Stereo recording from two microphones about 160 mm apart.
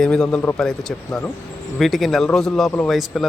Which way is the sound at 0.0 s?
5° left (ahead or behind).